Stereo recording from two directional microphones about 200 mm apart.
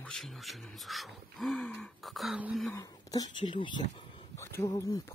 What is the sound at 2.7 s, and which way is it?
Speech, 20° left (ahead or behind).